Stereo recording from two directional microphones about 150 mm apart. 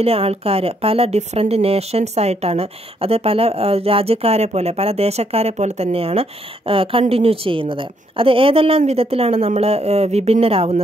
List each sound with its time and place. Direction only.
0.0 s a woman's voice: 40° right (ahead or behind)